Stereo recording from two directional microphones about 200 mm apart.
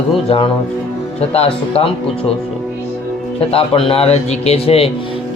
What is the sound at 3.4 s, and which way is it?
Speech, 30° left (ahead or behind).